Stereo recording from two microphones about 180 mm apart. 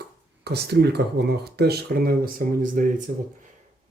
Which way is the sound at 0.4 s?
65° right (ahead or behind).